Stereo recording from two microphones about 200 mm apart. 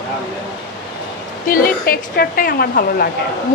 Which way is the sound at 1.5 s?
50° left (ahead or behind).